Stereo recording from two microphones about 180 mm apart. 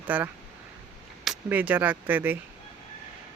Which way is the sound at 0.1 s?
10° right (ahead or behind).